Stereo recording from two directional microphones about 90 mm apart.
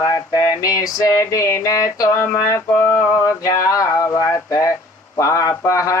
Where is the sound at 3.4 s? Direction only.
40° left (ahead or behind).